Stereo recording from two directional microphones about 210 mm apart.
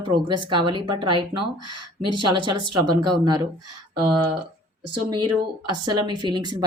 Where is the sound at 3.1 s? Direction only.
20° right (ahead or behind).